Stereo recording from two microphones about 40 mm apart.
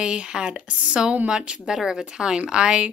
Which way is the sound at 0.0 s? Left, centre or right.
Right.